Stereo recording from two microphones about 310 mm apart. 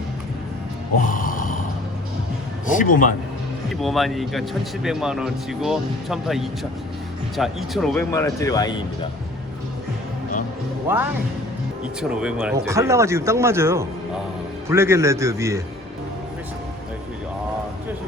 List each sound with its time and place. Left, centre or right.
1.0 s a sound: left
2.7 s a man's voice: left
3.8 s speech: centre
10.8 s speech: centre